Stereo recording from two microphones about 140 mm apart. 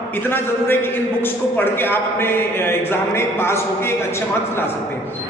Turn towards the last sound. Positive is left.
turn(degrees=15)  # may be behind; listen again after turning